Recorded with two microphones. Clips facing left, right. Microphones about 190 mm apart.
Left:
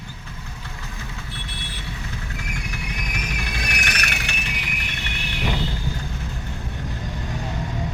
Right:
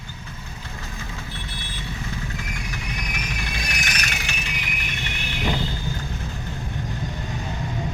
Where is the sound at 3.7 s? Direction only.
65° left (ahead or behind).